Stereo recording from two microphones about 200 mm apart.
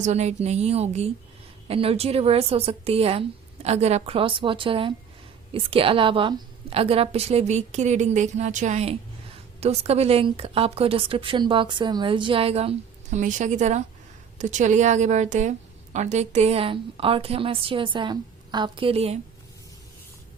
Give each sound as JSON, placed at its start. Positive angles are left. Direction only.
{"t": 0.0, "sound": "a woman's voice", "side_deg": -35}